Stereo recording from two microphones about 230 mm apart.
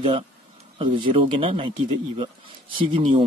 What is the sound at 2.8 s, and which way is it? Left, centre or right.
Speech, right.